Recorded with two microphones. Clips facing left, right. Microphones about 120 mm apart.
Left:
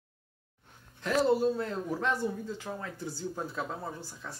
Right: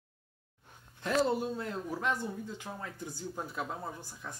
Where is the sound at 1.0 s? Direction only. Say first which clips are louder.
Left 4 dB; 20° right (ahead or behind).